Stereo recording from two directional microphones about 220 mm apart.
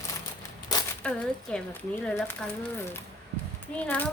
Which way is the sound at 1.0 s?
5° left (ahead or behind).